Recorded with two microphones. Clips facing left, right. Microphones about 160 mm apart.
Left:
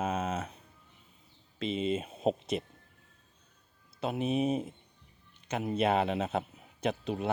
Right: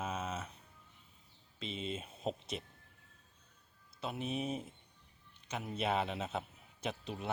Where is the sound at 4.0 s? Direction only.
70° left (ahead or behind).